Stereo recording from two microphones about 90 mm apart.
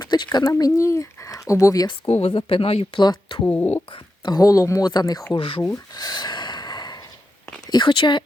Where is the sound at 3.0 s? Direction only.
50° left (ahead or behind).